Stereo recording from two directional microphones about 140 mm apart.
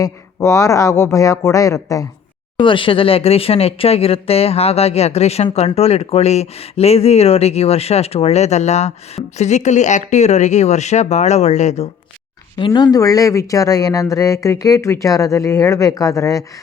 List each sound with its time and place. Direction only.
0.0 s speech: 20° left (ahead or behind)
2.6 s speech: 35° left (ahead or behind); by 11.9 s 55° left (ahead or behind)
12.5 s speech: 35° left (ahead or behind)